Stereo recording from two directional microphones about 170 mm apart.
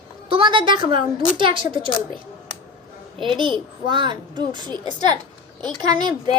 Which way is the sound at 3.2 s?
30° right (ahead or behind).